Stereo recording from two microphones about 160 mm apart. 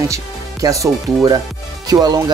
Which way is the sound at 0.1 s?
20° right (ahead or behind).